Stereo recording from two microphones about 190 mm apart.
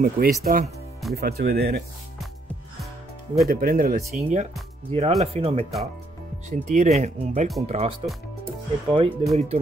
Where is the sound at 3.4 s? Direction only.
50° right (ahead or behind).